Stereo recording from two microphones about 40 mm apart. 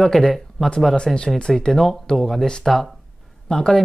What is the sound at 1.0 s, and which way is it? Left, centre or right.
Speech, centre.